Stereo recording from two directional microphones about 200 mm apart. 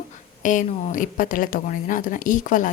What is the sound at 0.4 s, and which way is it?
A woman's voice, 40° left (ahead or behind).